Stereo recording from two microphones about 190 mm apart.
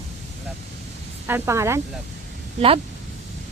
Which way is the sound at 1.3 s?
15° right (ahead or behind).